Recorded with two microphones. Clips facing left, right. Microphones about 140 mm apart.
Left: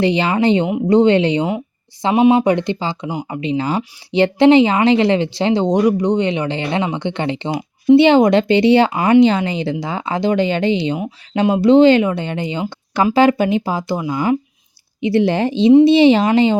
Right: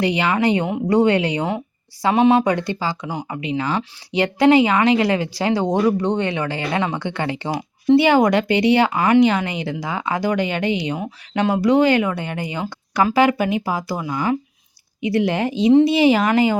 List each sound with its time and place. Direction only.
0.0 s a woman's voice: 30° left (ahead or behind)